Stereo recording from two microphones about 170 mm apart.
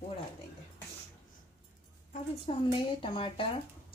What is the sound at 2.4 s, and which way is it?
Speech, 30° left (ahead or behind).